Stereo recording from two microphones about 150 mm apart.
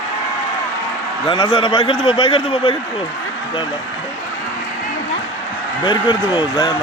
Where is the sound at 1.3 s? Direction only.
30° left (ahead or behind).